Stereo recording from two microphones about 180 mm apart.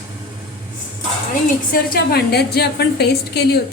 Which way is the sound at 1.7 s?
60° left (ahead or behind).